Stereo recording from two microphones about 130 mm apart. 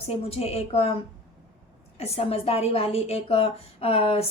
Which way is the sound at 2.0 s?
50° left (ahead or behind).